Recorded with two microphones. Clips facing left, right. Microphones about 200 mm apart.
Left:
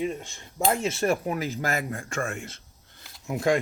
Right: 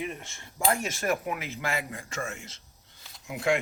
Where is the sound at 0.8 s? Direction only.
30° left (ahead or behind).